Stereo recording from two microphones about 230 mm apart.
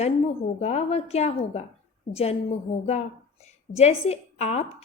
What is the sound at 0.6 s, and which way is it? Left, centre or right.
A woman's voice, left.